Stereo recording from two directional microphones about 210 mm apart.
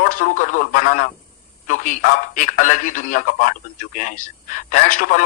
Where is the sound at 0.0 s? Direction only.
40° left (ahead or behind).